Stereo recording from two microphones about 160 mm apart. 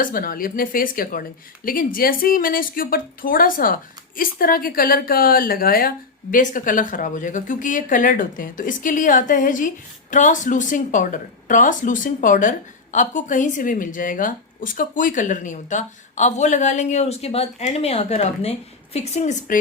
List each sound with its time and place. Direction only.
0.0 s a woman's voice: 60° left (ahead or behind)